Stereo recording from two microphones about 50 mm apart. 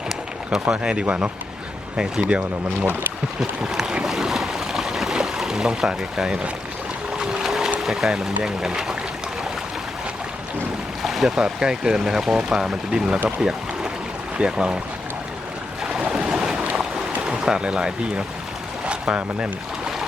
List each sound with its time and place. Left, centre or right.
0.7 s speech: right
3.6 s speech: centre
3.9 s boat: centre
7.8 s speech: centre
11.0 s boat: centre
11.3 s speech: centre
13.2 s a sound: centre
14.3 s speech: right
15.8 s boat: centre
17.2 s speech: centre